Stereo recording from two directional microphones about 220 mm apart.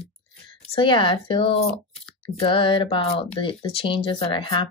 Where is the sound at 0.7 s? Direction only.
20° left (ahead or behind).